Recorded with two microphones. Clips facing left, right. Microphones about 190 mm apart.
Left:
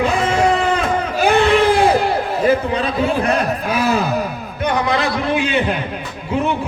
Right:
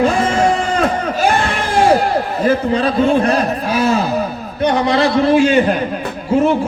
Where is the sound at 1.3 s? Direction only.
60° left (ahead or behind).